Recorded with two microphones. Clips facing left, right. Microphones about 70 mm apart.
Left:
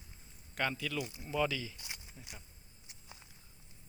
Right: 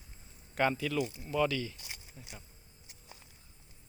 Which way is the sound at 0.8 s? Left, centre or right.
Centre.